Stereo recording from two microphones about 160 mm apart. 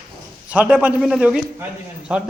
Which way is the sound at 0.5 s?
10° right (ahead or behind).